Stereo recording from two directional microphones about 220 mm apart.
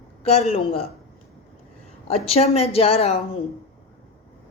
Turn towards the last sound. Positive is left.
turn(degrees=30)  # may be behind; listen again after turning